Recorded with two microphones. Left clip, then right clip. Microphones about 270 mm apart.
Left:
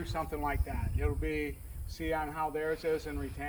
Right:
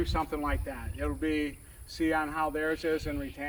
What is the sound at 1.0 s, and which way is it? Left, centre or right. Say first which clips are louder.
Speech: right 4 dB; right.